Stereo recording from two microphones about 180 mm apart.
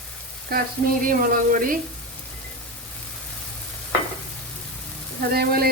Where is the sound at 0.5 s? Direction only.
55° right (ahead or behind).